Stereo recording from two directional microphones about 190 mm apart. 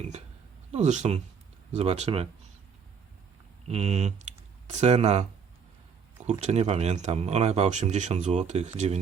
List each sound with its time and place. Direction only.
0.7 s speech: 40° right (ahead or behind)
3.7 s speech: 35° right (ahead or behind)
6.4 s speech: 35° right (ahead or behind)